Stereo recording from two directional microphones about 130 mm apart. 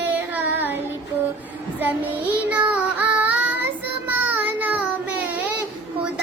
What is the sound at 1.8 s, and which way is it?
Child singing, 15° right (ahead or behind).